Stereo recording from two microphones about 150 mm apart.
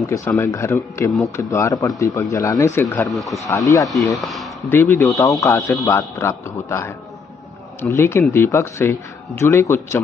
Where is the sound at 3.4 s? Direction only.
20° left (ahead or behind).